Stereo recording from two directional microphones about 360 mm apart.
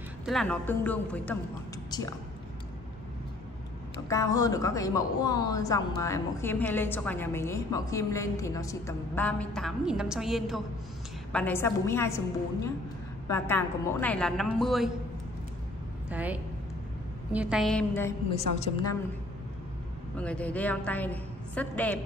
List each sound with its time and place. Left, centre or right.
0.2 s a woman's voice: centre
4.1 s a woman's voice: centre
13.3 s a woman's voice: centre
16.1 s a woman's voice: centre
18.3 s a woman's voice: centre
20.2 s a woman's voice: centre